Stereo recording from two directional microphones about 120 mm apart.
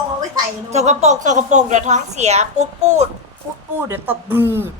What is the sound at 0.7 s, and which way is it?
A woman's voice, 70° right (ahead or behind).